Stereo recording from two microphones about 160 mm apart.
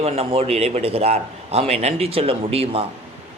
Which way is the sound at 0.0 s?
40° right (ahead or behind).